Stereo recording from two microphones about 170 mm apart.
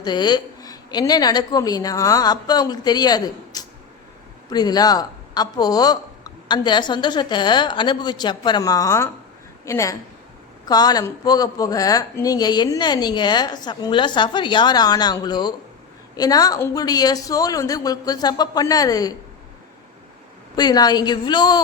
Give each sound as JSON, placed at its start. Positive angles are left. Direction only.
{"t": 0.0, "sound": "a woman's voice", "side_deg": 25}
{"t": 20.6, "sound": "a woman's voice", "side_deg": 25}